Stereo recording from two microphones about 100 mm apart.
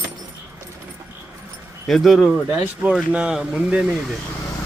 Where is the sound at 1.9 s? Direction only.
Centre (ahead or behind).